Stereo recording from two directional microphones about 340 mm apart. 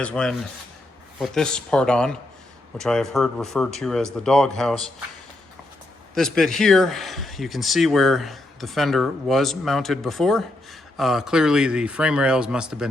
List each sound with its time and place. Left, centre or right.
0.0 s speech: centre
6.1 s speech: centre